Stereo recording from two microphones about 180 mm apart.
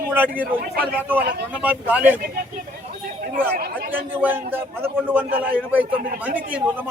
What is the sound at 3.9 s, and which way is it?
A man's voice, 10° right (ahead or behind).